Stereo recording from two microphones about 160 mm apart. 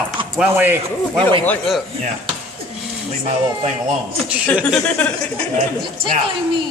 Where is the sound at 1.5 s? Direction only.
Centre (ahead or behind).